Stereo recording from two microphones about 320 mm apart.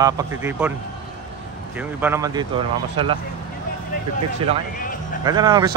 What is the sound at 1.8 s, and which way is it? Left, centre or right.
Speech, centre.